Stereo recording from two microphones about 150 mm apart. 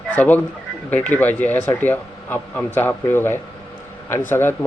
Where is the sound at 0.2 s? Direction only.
10° left (ahead or behind).